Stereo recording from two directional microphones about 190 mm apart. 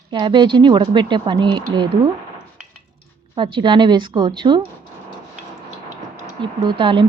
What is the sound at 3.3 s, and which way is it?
Speech, 25° right (ahead or behind).